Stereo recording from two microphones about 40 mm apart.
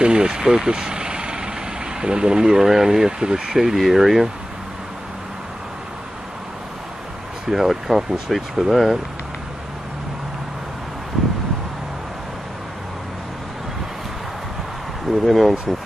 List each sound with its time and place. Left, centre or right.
0.0 s speech: right
7.5 s speech: centre
15.0 s speech: centre